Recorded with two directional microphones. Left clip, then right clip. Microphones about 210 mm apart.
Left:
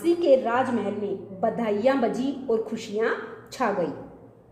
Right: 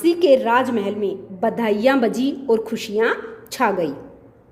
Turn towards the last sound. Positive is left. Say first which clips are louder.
# right 6 dB
turn(degrees=-50)  # may be behind; listen again after turning